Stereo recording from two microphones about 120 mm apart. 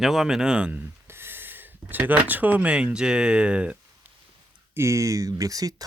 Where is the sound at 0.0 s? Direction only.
Centre (ahead or behind).